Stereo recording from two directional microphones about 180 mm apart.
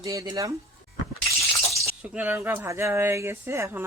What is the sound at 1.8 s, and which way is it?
Speech, 10° right (ahead or behind).